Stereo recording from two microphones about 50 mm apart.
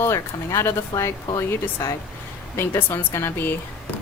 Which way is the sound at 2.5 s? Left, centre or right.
Left.